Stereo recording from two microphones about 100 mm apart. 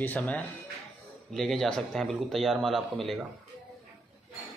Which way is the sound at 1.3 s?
5° left (ahead or behind).